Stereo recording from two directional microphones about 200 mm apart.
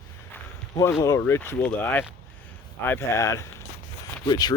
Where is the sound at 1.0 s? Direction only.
15° left (ahead or behind).